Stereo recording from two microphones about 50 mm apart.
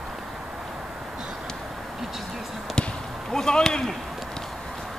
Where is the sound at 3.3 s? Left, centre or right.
Centre.